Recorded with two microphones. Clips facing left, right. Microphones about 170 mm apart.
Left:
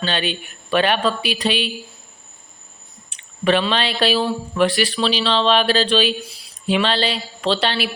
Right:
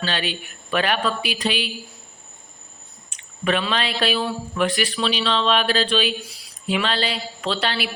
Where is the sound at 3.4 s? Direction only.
30° left (ahead or behind).